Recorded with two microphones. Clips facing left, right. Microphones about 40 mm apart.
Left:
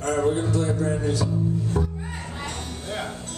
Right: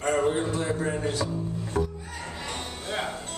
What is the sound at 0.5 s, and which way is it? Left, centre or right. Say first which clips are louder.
Speech: left 3 dB; right.